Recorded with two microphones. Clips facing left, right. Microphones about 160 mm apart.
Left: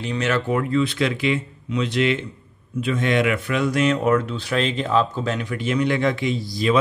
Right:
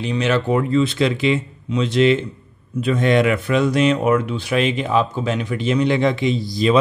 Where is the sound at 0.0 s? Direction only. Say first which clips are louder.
Right 3 dB; 20° right (ahead or behind).